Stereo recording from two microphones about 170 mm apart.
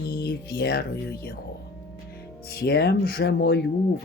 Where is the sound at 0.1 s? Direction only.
65° left (ahead or behind).